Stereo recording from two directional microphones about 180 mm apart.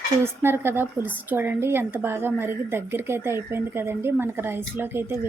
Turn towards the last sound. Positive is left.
turn(degrees=-10)  # may be behind; listen again after turning